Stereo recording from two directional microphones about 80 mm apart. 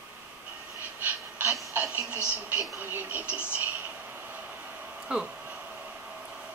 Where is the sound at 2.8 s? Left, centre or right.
Right.